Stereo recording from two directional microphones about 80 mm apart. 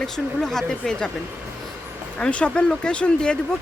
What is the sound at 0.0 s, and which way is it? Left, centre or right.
Speech, centre.